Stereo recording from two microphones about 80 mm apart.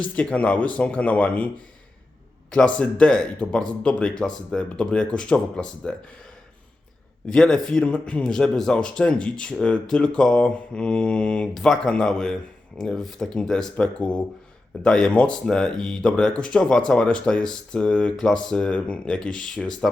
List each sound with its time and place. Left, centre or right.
0.0 s a man's voice: centre
2.5 s a man's voice: centre
7.3 s a man's voice: centre